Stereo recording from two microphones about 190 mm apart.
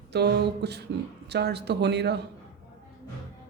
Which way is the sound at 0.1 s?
60° right (ahead or behind).